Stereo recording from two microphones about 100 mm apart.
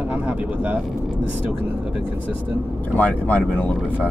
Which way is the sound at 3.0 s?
15° left (ahead or behind).